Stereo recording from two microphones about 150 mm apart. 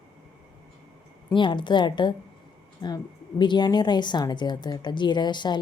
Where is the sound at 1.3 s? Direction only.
35° left (ahead or behind).